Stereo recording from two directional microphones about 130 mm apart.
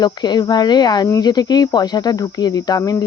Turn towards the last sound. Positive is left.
turn(degrees=30)  # may be behind; listen again after turning